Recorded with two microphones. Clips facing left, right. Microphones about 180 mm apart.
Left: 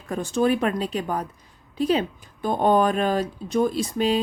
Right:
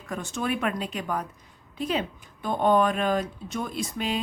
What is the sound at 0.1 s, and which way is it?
Speech, 35° left (ahead or behind).